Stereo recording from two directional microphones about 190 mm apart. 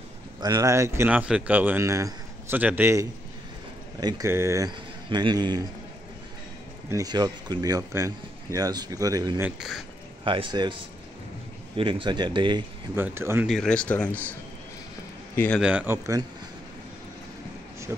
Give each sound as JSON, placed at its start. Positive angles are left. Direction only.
{"t": 0.4, "sound": "a man's voice", "side_deg": -20}
{"t": 6.9, "sound": "a man's voice", "side_deg": -20}
{"t": 9.4, "sound": "speech", "side_deg": 0}
{"t": 10.2, "sound": "a man's voice", "side_deg": -25}
{"t": 12.9, "sound": "speech", "side_deg": -10}
{"t": 13.5, "sound": "speech", "side_deg": 5}
{"t": 15.3, "sound": "a man's voice", "side_deg": 10}
{"t": 15.6, "sound": "speech", "side_deg": -5}